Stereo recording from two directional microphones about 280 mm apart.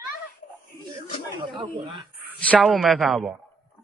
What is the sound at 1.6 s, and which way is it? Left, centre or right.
Speech, centre.